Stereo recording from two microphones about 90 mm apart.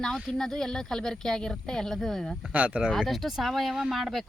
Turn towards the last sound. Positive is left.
turn(degrees=0)  # may be behind; listen again after turning